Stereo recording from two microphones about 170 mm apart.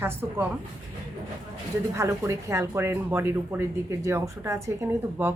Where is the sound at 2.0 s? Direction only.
15° right (ahead or behind).